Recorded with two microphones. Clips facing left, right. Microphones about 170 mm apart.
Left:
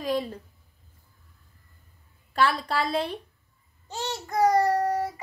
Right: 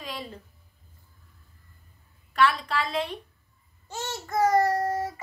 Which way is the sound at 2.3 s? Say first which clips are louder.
Even; 35° left (ahead or behind).